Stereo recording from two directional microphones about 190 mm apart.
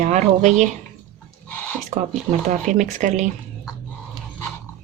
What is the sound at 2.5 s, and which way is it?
Speech, 40° right (ahead or behind).